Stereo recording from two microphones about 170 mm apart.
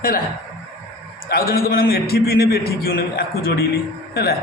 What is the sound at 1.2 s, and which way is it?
A man's voice, 60° left (ahead or behind).